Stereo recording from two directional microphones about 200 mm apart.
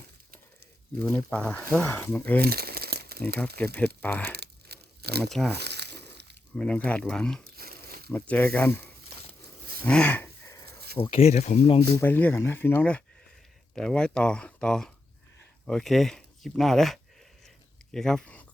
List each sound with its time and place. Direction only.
0.9 s speech: 10° left (ahead or behind)
2.4 s crumpling: 50° right (ahead or behind)
4.0 s speech: 5° left (ahead or behind)
4.3 s crumpling: 55° right (ahead or behind)
5.5 s a sound: 55° right (ahead or behind)
6.6 s speech: 5° left (ahead or behind)
7.4 s zipper: 50° right (ahead or behind)
8.1 s speech: 10° left (ahead or behind)
9.8 s a sound: 5° left (ahead or behind)
10.7 s a sound: 50° right (ahead or behind)
11.0 s speech: 30° left (ahead or behind)
11.9 s speech: 10° left (ahead or behind)